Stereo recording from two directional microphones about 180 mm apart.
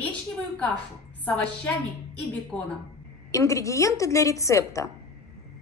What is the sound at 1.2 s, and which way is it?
Speech, 10° left (ahead or behind).